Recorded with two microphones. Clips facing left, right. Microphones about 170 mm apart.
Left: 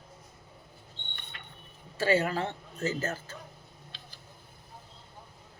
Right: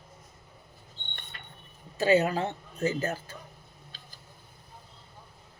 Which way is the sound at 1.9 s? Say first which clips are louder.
Right 3 dB; 20° right (ahead or behind).